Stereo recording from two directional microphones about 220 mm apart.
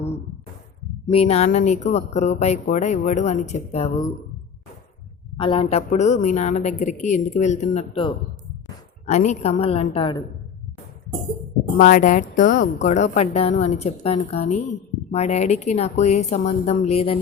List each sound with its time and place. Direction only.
1.0 s speech: 25° left (ahead or behind)
5.4 s a woman's voice: 25° left (ahead or behind)
11.8 s speech: 35° left (ahead or behind)